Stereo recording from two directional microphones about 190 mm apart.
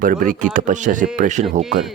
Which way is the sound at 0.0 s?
45° right (ahead or behind).